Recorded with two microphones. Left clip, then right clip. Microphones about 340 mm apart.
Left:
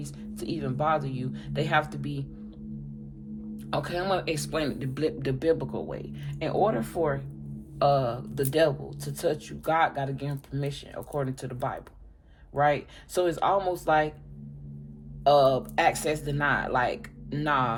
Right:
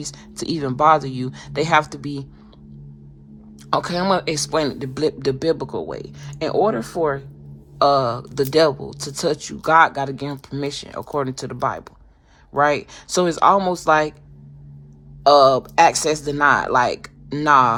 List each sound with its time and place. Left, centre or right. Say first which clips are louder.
0.0 s speech: right 8 dB; right
3.7 s speech: right 9 dB; right
15.2 s speech: right 8 dB; right